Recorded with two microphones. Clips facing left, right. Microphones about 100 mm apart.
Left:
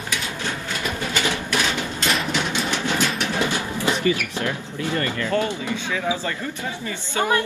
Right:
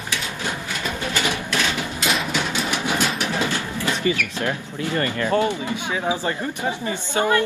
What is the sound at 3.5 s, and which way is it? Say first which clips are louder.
Bird: left 1 dB; 15° left (ahead or behind).